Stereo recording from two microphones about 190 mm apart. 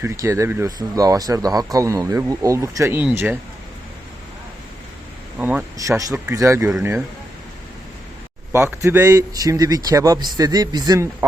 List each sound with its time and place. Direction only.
0.0 s speech: 15° right (ahead or behind)
5.4 s speech: 10° right (ahead or behind)
8.5 s a man's voice: 15° right (ahead or behind)